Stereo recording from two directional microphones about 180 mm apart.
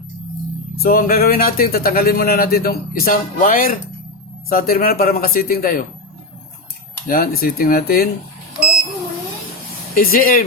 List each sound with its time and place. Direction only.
0.8 s speech: 55° left (ahead or behind)
7.1 s speech: 55° left (ahead or behind)
9.9 s speech: 55° left (ahead or behind)